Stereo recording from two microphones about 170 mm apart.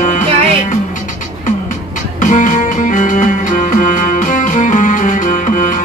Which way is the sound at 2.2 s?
50° left (ahead or behind).